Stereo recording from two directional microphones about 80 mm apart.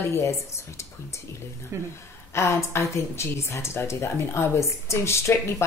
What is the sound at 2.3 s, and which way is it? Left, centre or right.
A woman's voice, left.